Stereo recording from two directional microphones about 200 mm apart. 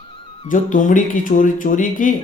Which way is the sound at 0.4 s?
40° left (ahead or behind).